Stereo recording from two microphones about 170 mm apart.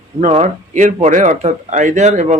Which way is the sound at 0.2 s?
40° right (ahead or behind).